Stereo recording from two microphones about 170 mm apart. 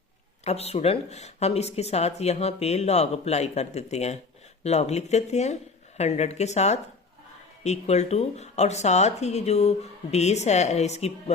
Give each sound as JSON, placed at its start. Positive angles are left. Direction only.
{"t": 0.4, "sound": "speech", "side_deg": 40}